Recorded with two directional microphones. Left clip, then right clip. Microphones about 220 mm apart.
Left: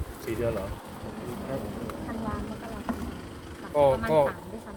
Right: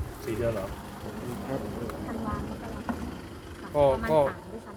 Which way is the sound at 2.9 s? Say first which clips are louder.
Left 1 dB; 50° left (ahead or behind).